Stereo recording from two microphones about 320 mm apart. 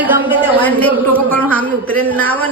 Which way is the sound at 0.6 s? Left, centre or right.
Centre.